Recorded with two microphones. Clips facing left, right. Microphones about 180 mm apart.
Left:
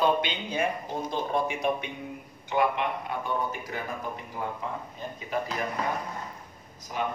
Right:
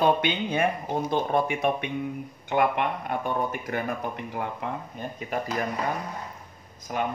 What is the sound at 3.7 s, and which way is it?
Speech, 65° right (ahead or behind).